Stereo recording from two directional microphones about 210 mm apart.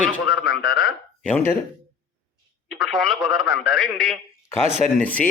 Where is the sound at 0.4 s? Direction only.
45° left (ahead or behind).